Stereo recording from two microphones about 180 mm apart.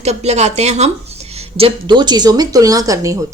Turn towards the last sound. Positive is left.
turn(degrees=-20)  # may be behind; listen again after turning